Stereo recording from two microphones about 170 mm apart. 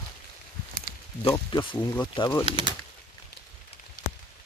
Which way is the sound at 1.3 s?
30° left (ahead or behind).